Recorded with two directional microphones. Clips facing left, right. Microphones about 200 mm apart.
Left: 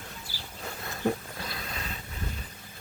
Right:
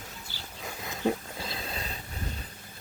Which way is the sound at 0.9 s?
15° right (ahead or behind).